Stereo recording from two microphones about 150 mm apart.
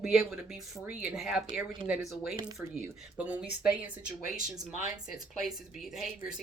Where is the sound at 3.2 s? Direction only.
10° right (ahead or behind).